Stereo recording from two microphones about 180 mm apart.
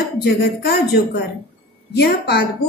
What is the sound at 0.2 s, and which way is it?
A woman's voice, 65° left (ahead or behind).